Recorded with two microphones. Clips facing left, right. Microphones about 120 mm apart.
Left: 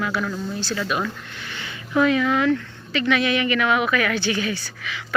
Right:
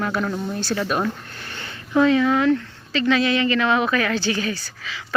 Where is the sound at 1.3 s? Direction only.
40° right (ahead or behind).